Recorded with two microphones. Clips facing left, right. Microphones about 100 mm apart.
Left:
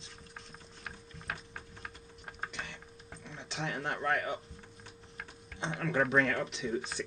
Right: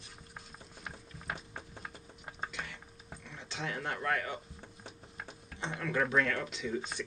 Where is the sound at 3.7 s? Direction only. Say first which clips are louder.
Left 1 dB; 10° left (ahead or behind).